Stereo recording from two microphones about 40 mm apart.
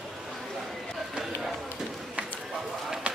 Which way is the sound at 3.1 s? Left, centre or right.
Right.